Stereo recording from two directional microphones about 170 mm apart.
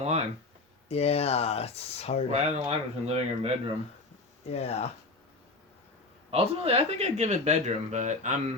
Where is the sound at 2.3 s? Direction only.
40° right (ahead or behind).